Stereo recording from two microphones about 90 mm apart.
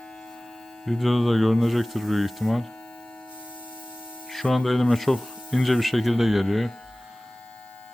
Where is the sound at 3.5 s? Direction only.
20° left (ahead or behind).